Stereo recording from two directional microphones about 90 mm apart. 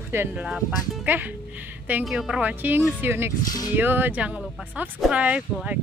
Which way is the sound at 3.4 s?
45° left (ahead or behind).